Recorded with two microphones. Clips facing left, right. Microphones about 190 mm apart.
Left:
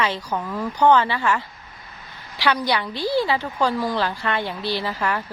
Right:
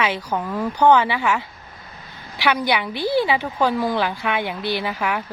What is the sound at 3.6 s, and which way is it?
Speech, centre (ahead or behind).